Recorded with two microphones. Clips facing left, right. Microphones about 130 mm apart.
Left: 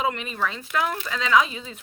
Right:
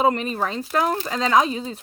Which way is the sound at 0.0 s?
40° right (ahead or behind).